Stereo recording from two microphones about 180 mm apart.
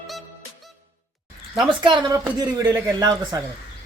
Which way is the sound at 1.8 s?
25° right (ahead or behind).